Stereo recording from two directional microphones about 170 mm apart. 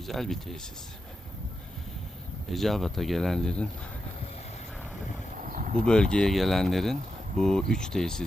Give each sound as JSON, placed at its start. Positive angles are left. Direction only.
{"t": 0.0, "sound": "speech", "side_deg": 0}
{"t": 2.5, "sound": "speech", "side_deg": 0}
{"t": 5.4, "sound": "a sound", "side_deg": -50}
{"t": 5.8, "sound": "speech", "side_deg": 5}